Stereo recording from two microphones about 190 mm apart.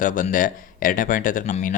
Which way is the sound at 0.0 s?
45° left (ahead or behind).